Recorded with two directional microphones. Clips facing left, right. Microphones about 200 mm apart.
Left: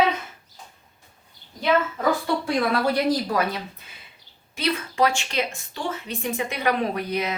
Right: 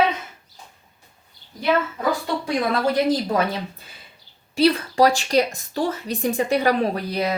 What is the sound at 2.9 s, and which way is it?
Speech, 25° right (ahead or behind).